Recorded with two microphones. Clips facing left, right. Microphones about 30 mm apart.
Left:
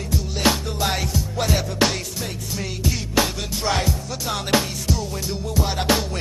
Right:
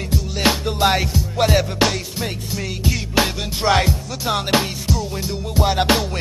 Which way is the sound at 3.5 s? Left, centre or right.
Right.